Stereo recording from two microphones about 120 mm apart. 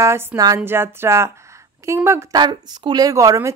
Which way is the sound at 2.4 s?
35° right (ahead or behind).